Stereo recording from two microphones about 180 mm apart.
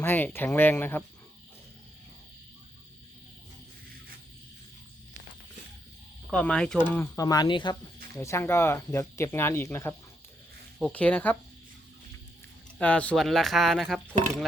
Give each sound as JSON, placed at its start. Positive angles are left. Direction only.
{"t": 0.0, "sound": "speech", "side_deg": 10}
{"t": 6.3, "sound": "speech", "side_deg": 5}
{"t": 6.9, "sound": "speech", "side_deg": 15}
{"t": 8.1, "sound": "speech", "side_deg": 15}
{"t": 12.8, "sound": "speech", "side_deg": 5}